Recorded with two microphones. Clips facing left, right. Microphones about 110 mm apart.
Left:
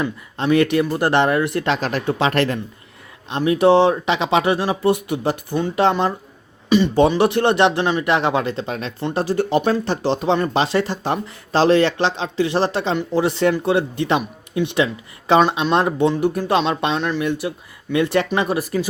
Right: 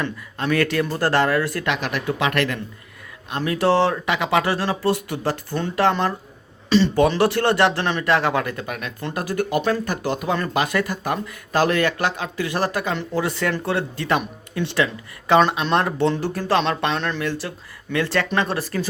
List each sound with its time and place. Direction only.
0.3 s speech: 20° left (ahead or behind)